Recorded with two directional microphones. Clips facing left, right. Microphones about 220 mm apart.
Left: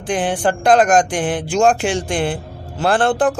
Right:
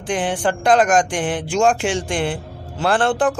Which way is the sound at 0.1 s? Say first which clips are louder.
Left 2 dB; 35° left (ahead or behind).